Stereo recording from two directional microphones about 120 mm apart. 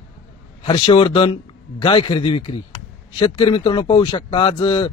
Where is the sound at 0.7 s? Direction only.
45° left (ahead or behind).